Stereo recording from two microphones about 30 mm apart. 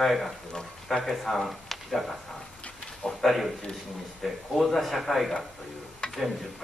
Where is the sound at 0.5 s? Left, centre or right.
Centre.